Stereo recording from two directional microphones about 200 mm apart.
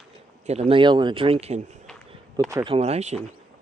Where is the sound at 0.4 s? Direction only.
30° right (ahead or behind).